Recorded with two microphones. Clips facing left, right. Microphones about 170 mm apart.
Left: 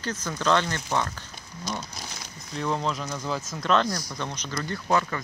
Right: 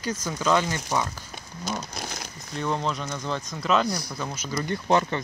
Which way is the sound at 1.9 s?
55° right (ahead or behind).